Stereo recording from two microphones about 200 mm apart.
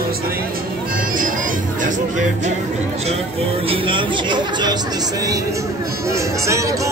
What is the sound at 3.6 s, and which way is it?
Music, 25° right (ahead or behind).